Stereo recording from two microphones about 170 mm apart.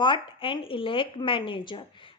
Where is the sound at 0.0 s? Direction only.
30° left (ahead or behind).